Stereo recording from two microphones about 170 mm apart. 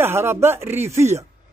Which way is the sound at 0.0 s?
15° right (ahead or behind).